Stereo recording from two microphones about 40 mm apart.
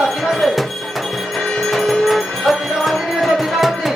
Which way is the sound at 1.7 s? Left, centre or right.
Centre.